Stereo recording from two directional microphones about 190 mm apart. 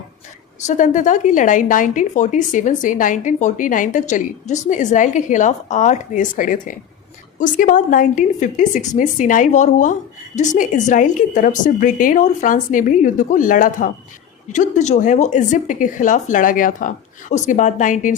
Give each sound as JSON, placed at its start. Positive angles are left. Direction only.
{"t": 0.7, "sound": "a woman's voice", "side_deg": 40}